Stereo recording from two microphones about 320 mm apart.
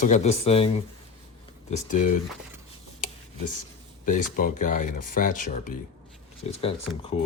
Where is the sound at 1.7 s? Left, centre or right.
Left.